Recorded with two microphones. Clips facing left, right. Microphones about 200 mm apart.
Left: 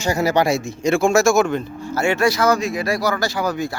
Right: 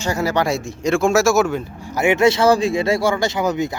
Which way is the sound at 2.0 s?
20° right (ahead or behind).